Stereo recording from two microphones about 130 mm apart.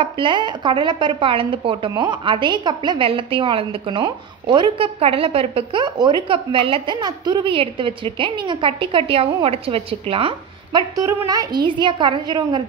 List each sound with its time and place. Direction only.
0.0 s speech: 40° right (ahead or behind)